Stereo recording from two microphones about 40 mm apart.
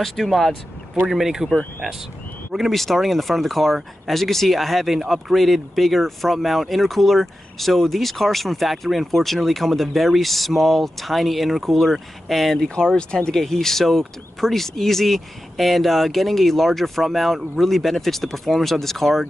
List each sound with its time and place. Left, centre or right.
0.0 s speech: centre
1.0 s speech: centre
2.5 s speech: centre
12.5 s speech: centre
13.4 s speech: centre